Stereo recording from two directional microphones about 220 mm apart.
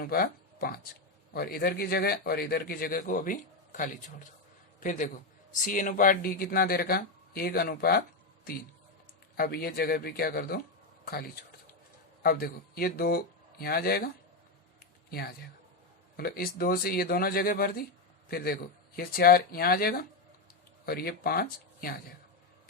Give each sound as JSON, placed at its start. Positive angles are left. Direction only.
{"t": 0.0, "sound": "a man's voice", "side_deg": 45}
{"t": 9.4, "sound": "a man's voice", "side_deg": 45}
{"t": 16.1, "sound": "a man's voice", "side_deg": 45}